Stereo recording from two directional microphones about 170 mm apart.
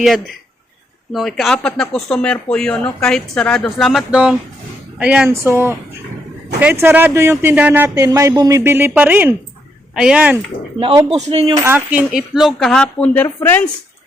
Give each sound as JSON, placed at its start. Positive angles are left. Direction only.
{"t": 1.1, "sound": "speech", "side_deg": 0}
{"t": 10.8, "sound": "speech", "side_deg": -30}
{"t": 11.5, "sound": "speech", "side_deg": -15}